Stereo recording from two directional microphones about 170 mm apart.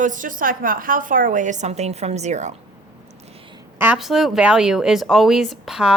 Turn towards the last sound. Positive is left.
turn(degrees=0)  # may be behind; listen again after turning